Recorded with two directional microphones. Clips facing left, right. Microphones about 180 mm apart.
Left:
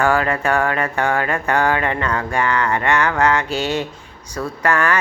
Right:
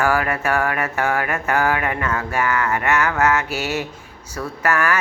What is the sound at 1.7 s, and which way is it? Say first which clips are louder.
Speech: left 2 dB; 25° left (ahead or behind).